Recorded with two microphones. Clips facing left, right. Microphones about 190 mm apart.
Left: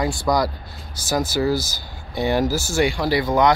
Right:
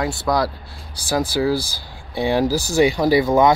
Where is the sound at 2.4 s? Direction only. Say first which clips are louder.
Right 3 dB; 35° right (ahead or behind).